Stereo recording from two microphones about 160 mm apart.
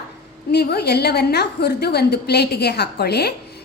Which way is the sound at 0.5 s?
75° left (ahead or behind).